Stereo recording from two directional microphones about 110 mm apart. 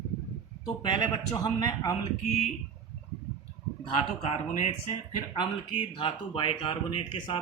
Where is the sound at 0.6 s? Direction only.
45° left (ahead or behind).